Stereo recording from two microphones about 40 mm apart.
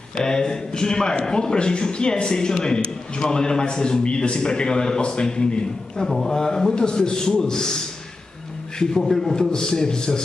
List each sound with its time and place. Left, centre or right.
0.1 s a man's voice: centre
6.0 s a man's voice: centre
8.7 s a man's voice: centre